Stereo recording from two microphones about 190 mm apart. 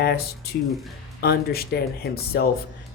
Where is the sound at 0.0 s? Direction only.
55° left (ahead or behind).